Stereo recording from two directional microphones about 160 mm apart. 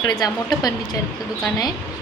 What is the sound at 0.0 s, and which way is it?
Speech, 20° left (ahead or behind).